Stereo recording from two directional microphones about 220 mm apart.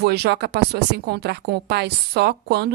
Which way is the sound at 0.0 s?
50° right (ahead or behind).